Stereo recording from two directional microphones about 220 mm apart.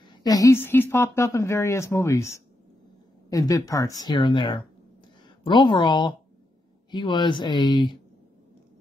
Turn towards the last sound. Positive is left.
turn(degrees=20)  # may be behind; listen again after turning